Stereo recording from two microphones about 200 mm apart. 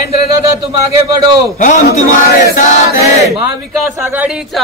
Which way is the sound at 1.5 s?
40° left (ahead or behind).